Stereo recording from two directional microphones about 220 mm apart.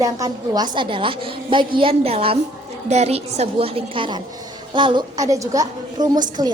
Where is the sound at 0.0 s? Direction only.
15° right (ahead or behind).